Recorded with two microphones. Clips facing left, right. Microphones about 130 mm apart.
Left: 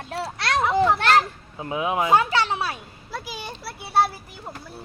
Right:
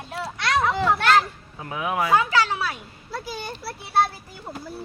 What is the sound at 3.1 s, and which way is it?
A child's voice, 10° left (ahead or behind).